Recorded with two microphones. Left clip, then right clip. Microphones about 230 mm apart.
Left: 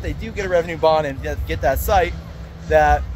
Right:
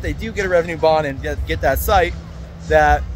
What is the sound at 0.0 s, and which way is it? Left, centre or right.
Speech, centre.